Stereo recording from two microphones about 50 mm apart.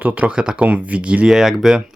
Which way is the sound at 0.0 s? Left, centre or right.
Right.